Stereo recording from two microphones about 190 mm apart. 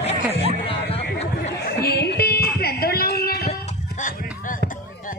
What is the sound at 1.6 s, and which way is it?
Music, 55° left (ahead or behind).